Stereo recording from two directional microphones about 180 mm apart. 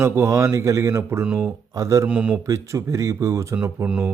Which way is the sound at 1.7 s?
15° right (ahead or behind).